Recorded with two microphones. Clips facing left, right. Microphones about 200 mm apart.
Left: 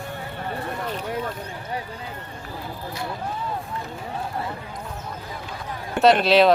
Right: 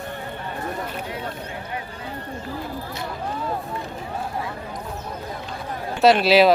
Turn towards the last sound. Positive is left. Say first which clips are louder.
# right 1 dB
turn(degrees=-5)  # may be behind; listen again after turning